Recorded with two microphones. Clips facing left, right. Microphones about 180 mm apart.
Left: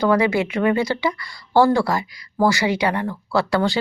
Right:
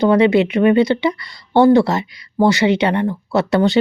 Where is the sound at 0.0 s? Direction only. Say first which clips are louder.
Right 5 dB; 25° right (ahead or behind).